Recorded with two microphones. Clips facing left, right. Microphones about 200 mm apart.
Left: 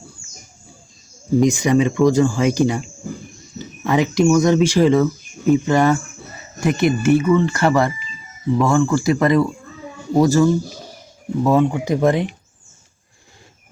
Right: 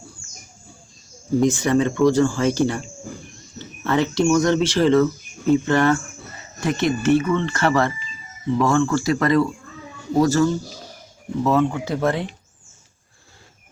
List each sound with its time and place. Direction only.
1.4 s speech: 15° left (ahead or behind)